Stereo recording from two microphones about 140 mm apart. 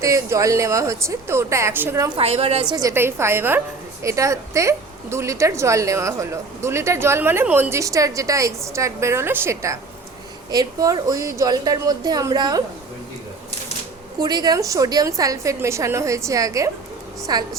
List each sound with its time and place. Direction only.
0.0 s a woman's voice: 20° right (ahead or behind)
2.1 s a woman's voice: 45° right (ahead or behind)
2.7 s a woman's voice: 20° right (ahead or behind)
14.2 s a woman's voice: 30° right (ahead or behind)